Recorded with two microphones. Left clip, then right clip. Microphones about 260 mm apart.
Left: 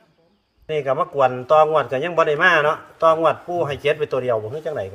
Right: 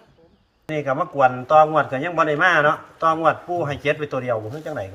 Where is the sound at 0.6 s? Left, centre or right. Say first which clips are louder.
Left 2 dB; left.